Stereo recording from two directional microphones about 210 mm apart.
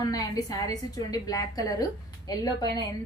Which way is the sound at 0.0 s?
20° left (ahead or behind).